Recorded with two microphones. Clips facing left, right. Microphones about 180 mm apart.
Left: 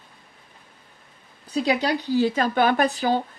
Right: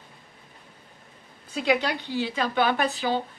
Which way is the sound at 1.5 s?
40° left (ahead or behind).